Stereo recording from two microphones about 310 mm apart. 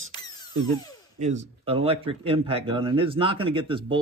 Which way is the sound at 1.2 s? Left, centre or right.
Right.